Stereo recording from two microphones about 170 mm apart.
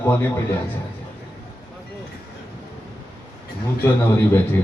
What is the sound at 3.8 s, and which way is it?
Speech, 15° left (ahead or behind).